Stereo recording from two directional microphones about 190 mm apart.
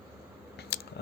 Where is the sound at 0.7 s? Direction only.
60° left (ahead or behind).